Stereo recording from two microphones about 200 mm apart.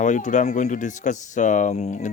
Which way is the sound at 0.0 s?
40° left (ahead or behind).